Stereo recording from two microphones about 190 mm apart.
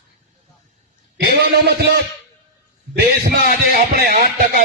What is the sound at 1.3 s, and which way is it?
Speech, 55° right (ahead or behind).